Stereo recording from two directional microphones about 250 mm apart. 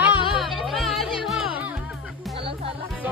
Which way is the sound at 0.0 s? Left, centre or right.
Centre.